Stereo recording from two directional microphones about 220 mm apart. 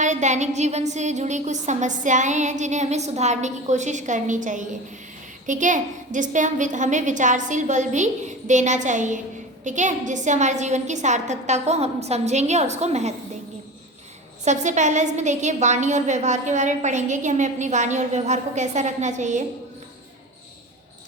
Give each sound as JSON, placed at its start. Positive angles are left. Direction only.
{"t": 0.0, "sound": "a woman's voice", "side_deg": -35}
{"t": 14.4, "sound": "a woman's voice", "side_deg": -30}